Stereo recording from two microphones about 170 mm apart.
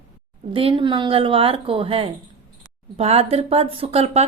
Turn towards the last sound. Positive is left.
turn(degrees=-35)  # may be behind; listen again after turning